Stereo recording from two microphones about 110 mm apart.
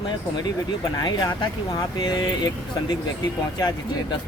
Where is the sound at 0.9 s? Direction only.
40° left (ahead or behind).